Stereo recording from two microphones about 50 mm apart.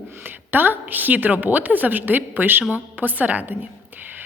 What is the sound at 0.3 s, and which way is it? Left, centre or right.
A woman's voice, right.